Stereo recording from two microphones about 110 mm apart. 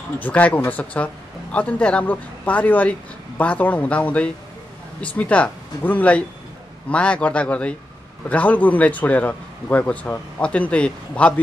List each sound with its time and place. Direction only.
0.2 s speech: 15° left (ahead or behind)